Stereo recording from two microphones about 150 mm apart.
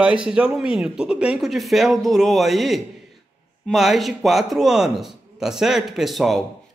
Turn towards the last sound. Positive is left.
turn(degrees=0)  # may be behind; listen again after turning